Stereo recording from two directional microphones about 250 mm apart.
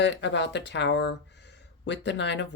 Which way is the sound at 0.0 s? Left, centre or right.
Left.